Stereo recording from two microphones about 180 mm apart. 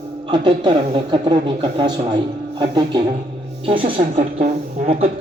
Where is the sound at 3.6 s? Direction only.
30° right (ahead or behind).